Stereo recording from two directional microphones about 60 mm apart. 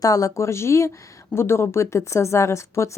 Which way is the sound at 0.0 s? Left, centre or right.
Left.